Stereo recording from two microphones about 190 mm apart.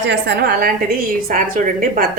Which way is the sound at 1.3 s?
45° right (ahead or behind).